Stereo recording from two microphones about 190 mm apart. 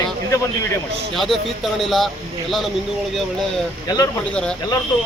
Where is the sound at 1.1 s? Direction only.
Centre (ahead or behind).